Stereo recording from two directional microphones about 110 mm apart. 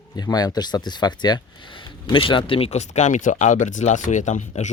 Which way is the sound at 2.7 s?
90° left.